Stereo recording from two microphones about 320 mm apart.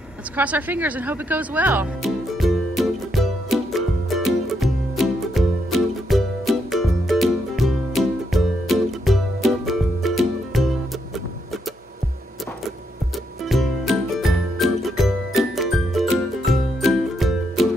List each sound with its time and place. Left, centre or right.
0.4 s music: centre
13.5 s music: centre